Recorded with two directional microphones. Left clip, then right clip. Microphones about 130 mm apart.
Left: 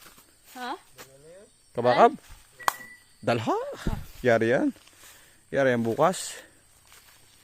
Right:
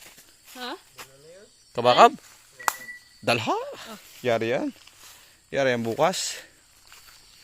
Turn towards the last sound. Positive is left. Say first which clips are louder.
# right 1 dB
turn(degrees=30)  # may be behind; listen again after turning